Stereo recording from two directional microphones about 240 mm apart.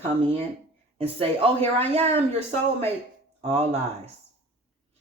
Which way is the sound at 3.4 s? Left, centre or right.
Right.